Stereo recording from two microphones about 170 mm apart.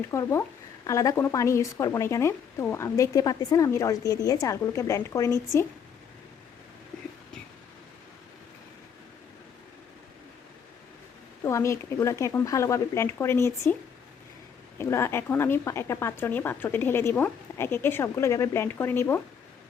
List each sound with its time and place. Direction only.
0.1 s speech: 15° left (ahead or behind)
6.9 s a sound: 5° left (ahead or behind)
11.4 s speech: 15° left (ahead or behind)
14.8 s speech: 15° left (ahead or behind)